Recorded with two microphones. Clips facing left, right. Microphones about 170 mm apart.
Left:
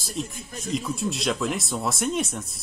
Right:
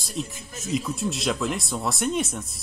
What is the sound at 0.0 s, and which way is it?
Speech, centre (ahead or behind).